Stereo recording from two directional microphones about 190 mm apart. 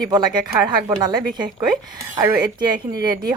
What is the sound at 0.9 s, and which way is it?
Speech, 20° right (ahead or behind).